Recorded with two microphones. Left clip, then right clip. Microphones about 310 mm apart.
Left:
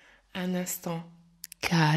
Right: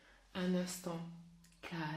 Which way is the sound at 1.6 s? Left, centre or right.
Left.